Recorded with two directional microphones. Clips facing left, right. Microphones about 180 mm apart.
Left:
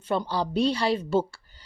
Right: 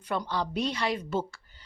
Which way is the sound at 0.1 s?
30° left (ahead or behind).